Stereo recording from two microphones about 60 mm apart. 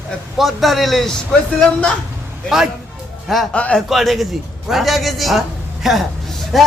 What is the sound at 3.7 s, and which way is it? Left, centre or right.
A man's voice, centre.